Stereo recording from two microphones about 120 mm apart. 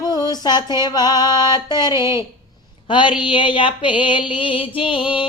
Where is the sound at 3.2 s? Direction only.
45° left (ahead or behind).